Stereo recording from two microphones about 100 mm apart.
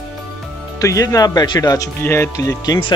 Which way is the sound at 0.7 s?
35° left (ahead or behind).